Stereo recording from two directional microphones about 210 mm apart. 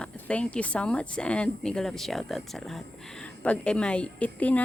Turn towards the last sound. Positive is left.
turn(degrees=5)  # may be behind; listen again after turning